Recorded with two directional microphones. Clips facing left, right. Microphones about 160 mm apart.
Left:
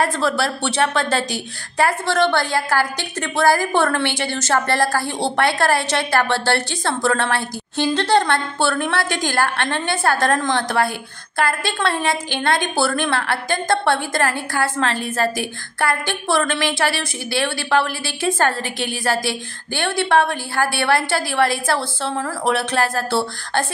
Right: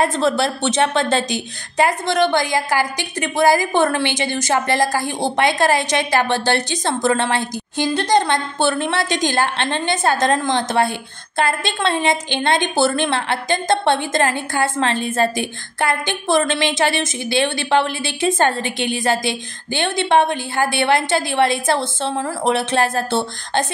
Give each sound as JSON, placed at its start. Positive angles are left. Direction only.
{"t": 0.0, "sound": "a woman's voice", "side_deg": -20}